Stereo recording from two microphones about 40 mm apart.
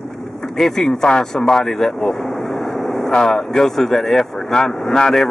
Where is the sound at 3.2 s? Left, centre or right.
Centre.